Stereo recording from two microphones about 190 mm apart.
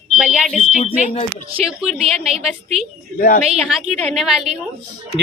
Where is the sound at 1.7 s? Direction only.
5° right (ahead or behind).